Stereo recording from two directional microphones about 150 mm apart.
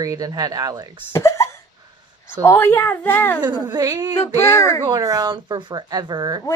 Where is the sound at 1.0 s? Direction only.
20° left (ahead or behind).